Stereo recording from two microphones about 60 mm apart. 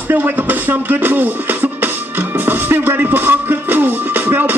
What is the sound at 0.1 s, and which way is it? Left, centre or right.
Music, right.